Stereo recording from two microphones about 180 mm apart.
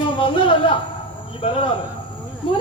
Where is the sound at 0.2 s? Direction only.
30° left (ahead or behind).